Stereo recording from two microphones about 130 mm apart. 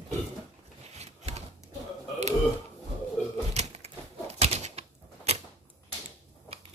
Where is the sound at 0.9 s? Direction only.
55° right (ahead or behind).